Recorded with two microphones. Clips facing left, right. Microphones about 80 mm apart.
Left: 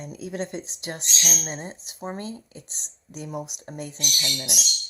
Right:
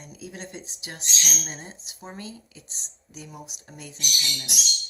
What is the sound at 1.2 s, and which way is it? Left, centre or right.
Speech, centre.